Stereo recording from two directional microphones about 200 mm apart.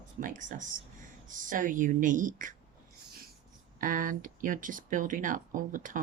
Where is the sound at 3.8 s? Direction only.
40° right (ahead or behind).